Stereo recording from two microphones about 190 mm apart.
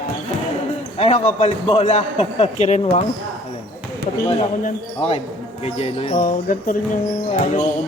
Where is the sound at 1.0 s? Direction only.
35° left (ahead or behind).